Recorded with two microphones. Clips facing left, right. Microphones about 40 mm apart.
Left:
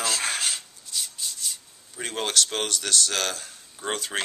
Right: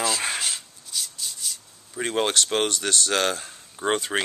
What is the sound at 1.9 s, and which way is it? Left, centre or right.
Speech, centre.